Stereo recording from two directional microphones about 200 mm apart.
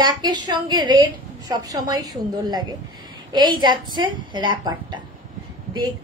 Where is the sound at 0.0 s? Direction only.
20° right (ahead or behind).